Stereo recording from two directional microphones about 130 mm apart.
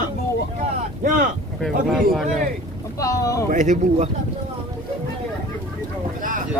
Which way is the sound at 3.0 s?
25° left (ahead or behind).